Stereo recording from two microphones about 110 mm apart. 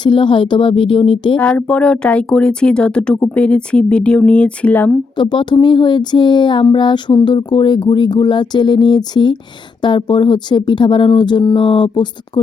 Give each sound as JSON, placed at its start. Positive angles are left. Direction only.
{"t": 0.0, "sound": "speech", "side_deg": 50}
{"t": 1.4, "sound": "speech", "side_deg": 10}
{"t": 5.1, "sound": "speech", "side_deg": 45}